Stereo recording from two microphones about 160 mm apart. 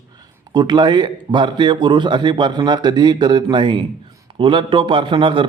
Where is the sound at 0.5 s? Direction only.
25° right (ahead or behind).